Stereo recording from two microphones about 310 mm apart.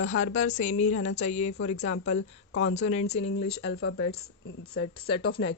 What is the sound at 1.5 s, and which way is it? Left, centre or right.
A woman's voice, left.